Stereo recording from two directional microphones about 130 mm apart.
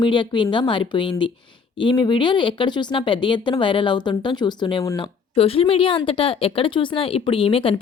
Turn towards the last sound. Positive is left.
turn(degrees=45)  # may be behind; listen again after turning